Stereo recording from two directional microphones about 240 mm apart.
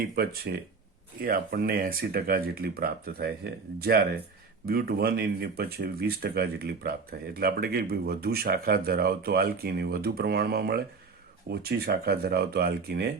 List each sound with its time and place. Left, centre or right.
0.0 s speech: right